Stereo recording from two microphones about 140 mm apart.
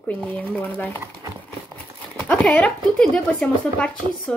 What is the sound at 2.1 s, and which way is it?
Speech, 10° left (ahead or behind).